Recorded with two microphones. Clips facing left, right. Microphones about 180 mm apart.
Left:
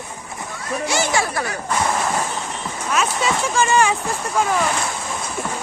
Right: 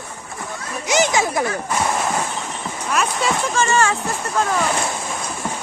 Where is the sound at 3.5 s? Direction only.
15° left (ahead or behind).